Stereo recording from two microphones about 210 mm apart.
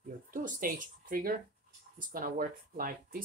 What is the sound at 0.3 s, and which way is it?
Speech, 40° right (ahead or behind).